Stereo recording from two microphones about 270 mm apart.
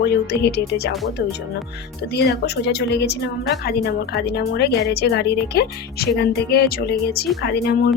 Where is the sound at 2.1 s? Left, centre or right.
Left.